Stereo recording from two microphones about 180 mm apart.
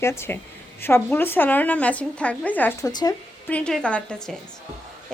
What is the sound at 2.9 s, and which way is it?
Speech, 20° left (ahead or behind).